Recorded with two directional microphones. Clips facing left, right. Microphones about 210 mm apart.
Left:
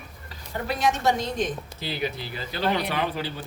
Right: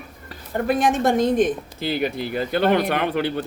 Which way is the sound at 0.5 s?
50° right (ahead or behind).